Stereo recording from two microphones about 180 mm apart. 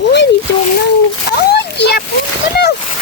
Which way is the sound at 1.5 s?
70° left (ahead or behind).